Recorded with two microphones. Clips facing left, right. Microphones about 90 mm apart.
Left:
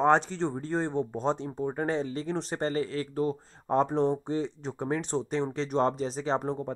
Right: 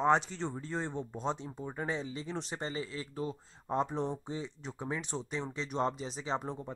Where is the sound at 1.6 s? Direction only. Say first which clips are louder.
Left 9 dB; 40° left (ahead or behind).